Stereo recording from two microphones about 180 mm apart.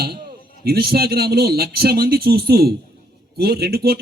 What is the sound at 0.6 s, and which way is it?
A man's voice, 60° right (ahead or behind).